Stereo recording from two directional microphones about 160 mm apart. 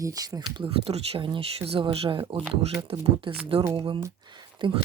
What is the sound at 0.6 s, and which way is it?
Speech, 35° right (ahead or behind).